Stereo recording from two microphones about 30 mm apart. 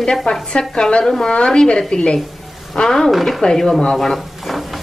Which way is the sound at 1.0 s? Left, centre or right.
Centre.